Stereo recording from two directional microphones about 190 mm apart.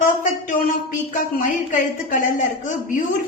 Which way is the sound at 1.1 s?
40° left (ahead or behind).